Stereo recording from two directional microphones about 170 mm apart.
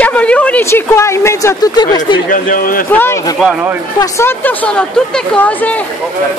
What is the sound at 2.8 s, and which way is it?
A woman's voice, 15° left (ahead or behind).